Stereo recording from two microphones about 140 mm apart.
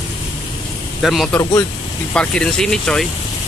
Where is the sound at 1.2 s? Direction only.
20° left (ahead or behind).